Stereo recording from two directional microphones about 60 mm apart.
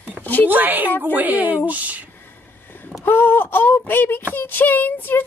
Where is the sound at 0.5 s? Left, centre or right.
Right.